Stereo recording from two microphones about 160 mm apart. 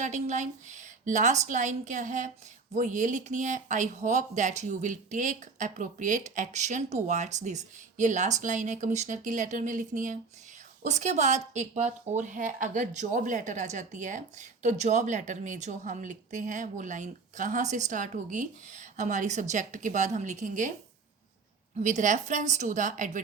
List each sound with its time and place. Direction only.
0.0 s speech: 50° right (ahead or behind)
21.8 s speech: 50° right (ahead or behind)